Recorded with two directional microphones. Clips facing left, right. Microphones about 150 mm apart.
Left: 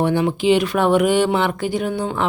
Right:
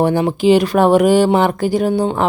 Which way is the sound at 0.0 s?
40° right (ahead or behind).